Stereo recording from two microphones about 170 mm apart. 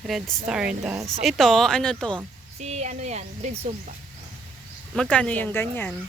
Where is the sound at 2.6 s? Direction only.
40° right (ahead or behind).